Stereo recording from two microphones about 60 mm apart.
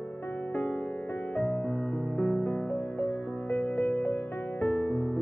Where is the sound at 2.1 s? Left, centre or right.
Centre.